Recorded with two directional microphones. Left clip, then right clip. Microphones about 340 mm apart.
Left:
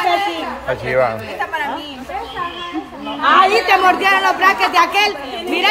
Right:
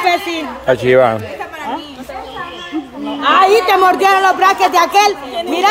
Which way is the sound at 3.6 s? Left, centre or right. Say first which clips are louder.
Right 2 dB; centre.